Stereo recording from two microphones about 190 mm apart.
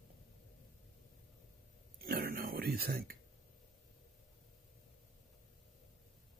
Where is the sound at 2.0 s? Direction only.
50° right (ahead or behind).